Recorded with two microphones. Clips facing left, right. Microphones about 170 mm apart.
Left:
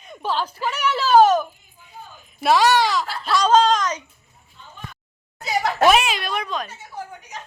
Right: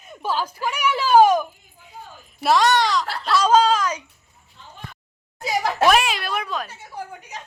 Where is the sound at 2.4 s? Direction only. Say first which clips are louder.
Left 1 dB; 5° left (ahead or behind).